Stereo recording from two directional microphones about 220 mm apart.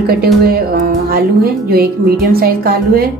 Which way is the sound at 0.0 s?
45° right (ahead or behind).